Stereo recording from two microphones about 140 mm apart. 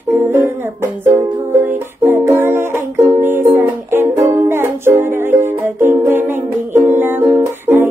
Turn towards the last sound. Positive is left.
turn(degrees=-15)  # may be behind; listen again after turning